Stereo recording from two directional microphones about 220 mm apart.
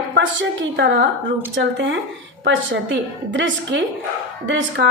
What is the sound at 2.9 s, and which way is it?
A woman's voice, 55° right (ahead or behind).